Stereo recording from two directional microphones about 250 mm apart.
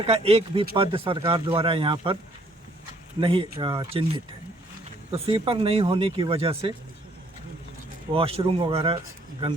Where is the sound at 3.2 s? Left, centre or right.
Right.